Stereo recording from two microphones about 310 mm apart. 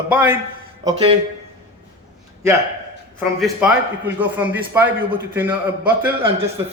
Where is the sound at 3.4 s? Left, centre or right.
Centre.